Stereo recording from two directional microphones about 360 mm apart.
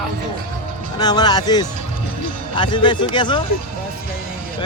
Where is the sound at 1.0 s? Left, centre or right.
Centre.